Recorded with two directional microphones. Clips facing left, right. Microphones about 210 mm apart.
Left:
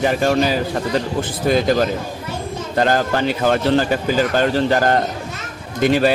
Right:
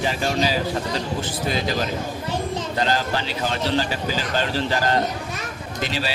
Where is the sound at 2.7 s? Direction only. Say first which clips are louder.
Left 8 dB; 55° left (ahead or behind).